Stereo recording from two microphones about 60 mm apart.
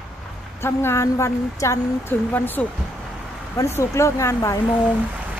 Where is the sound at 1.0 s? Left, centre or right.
Left.